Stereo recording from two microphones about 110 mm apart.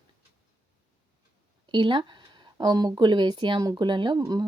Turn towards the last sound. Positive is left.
turn(degrees=-35)  # may be behind; listen again after turning